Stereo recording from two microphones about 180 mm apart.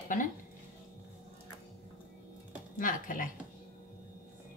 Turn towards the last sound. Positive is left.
turn(degrees=50)  # may be behind; listen again after turning